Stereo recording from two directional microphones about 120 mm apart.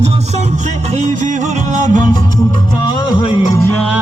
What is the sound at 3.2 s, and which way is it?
Music, 45° left (ahead or behind).